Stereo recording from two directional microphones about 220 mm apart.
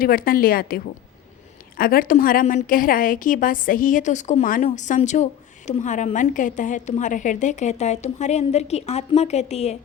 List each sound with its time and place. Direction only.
0.0 s a woman's voice: 40° left (ahead or behind)